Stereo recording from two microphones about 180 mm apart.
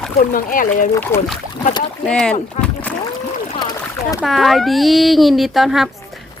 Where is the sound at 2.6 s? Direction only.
40° left (ahead or behind).